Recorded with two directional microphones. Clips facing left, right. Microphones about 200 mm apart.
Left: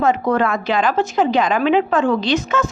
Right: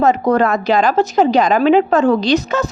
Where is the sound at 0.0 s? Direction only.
40° right (ahead or behind).